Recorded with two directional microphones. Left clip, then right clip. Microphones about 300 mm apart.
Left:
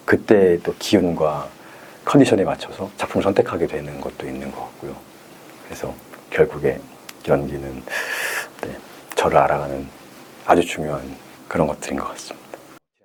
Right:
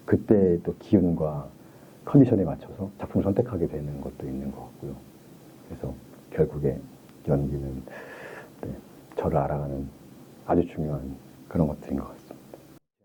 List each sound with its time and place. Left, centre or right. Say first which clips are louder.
0.0 s speech: left 7 dB; centre
6.3 s speech: left 8 dB; centre
7.9 s gasp: left 16 dB; centre
10.4 s speech: left 9 dB; centre